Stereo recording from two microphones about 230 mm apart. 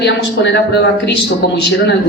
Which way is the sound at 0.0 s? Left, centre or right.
Left.